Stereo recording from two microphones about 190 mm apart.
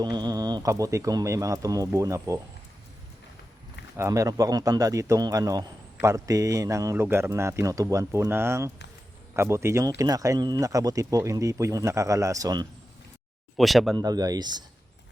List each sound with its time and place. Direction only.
0.0 s speech: 20° right (ahead or behind)
3.9 s speech: 15° right (ahead or behind)
13.6 s speech: centre (ahead or behind)
13.9 s speech: 20° right (ahead or behind)